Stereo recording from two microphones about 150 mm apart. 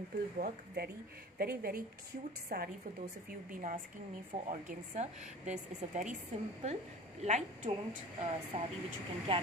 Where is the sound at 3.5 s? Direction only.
60° right (ahead or behind).